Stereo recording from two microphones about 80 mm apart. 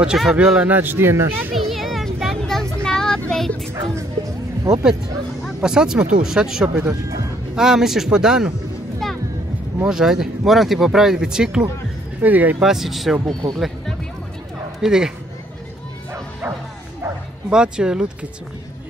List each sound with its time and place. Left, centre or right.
0.0 s speech: centre
0.7 s speech: right
1.5 s vehicle: centre
3.9 s music: right
5.6 s speech: centre
9.0 s music: centre
9.8 s speech: centre
12.2 s speech: right
12.6 s speech: centre
13.3 s speech: right
14.8 s speech: centre
17.5 s speech: centre